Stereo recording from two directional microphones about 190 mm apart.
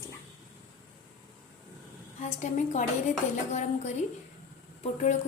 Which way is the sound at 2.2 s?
40° left (ahead or behind).